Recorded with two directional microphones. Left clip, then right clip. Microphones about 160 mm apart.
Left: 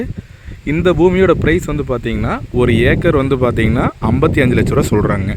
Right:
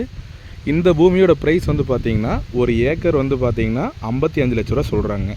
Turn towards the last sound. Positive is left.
turn(degrees=20)  # may be behind; listen again after turning